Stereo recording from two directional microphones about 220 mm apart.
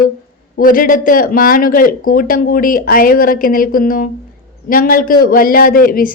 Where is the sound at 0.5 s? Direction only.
40° left (ahead or behind).